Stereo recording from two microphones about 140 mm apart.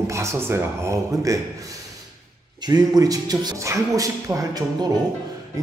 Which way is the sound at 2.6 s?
30° right (ahead or behind).